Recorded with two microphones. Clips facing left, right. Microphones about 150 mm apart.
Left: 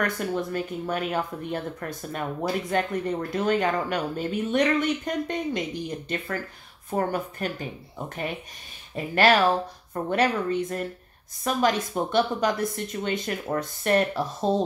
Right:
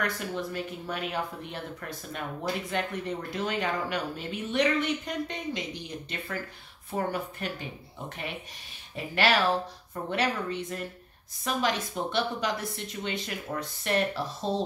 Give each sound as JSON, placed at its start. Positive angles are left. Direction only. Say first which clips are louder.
{"t": 0.0, "sound": "speech", "louder": "left 5 dB", "side_deg": 50}
{"t": 8.9, "sound": "speech", "louder": "left 5 dB", "side_deg": 45}